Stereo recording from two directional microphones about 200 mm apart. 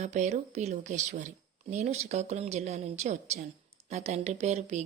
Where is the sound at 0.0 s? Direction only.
35° right (ahead or behind).